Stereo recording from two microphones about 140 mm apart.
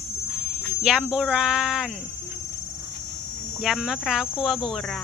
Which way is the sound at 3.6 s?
5° right (ahead or behind).